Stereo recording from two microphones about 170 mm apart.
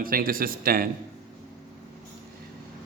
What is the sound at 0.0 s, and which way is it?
Speech, 55° right (ahead or behind).